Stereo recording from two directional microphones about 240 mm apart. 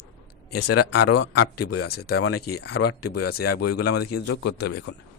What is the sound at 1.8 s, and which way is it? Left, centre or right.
Speech, left.